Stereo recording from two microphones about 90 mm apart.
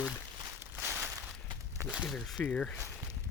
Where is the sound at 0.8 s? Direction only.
25° right (ahead or behind).